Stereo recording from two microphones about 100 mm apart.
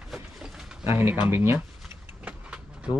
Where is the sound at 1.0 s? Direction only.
20° right (ahead or behind).